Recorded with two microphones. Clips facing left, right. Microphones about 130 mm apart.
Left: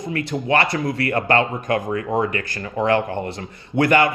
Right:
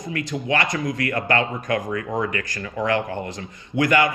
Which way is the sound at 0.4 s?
30° left (ahead or behind).